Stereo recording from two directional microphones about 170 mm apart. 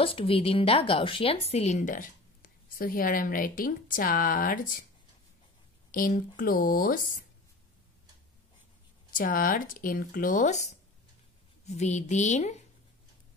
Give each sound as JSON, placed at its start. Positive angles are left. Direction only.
{"t": 0.0, "sound": "a woman's voice", "side_deg": 35}
{"t": 5.9, "sound": "speech", "side_deg": 55}
{"t": 9.1, "sound": "a woman's voice", "side_deg": 55}